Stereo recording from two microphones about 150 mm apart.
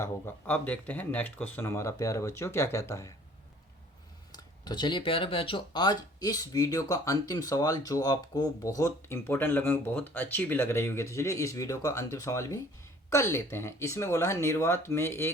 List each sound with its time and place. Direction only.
0.0 s speech: 15° left (ahead or behind)
4.3 s speech: 30° left (ahead or behind)